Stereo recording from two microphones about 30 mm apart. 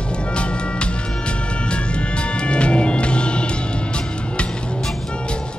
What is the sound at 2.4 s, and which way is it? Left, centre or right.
Music, left.